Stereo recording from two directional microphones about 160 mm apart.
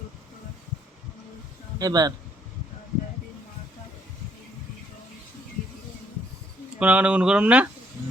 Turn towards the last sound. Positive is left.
turn(degrees=-10)  # may be behind; listen again after turning